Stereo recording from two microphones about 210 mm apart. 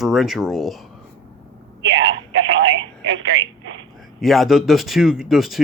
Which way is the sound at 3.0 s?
65° right (ahead or behind).